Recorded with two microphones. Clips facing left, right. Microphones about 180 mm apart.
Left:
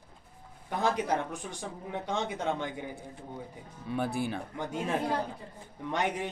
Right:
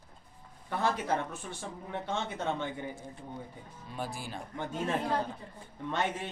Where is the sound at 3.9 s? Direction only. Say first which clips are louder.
Left 8 dB; 60° left (ahead or behind).